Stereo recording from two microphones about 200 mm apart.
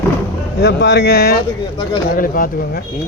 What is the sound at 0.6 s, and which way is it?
A man's voice, 60° left (ahead or behind).